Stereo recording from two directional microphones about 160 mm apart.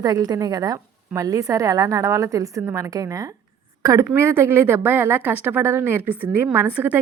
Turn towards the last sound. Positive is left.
turn(degrees=-10)  # may be behind; listen again after turning